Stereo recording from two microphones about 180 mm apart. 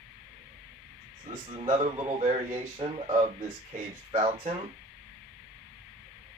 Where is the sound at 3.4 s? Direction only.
35° right (ahead or behind).